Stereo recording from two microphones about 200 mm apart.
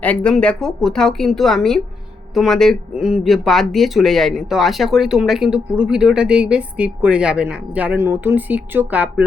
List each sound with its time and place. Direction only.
0.0 s speech: 5° left (ahead or behind)